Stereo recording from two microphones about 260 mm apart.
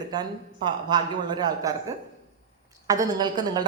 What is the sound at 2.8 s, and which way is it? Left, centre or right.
Speech, centre.